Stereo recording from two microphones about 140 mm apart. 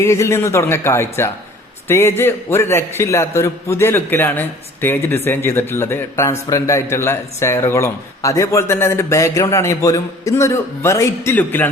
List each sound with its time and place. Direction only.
0.0 s a man's voice: 20° left (ahead or behind)